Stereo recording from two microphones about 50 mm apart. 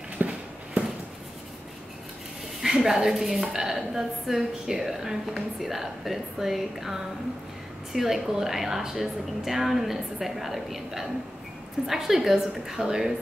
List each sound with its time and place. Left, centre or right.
0.2 s horse: right
2.6 s a woman's voice: centre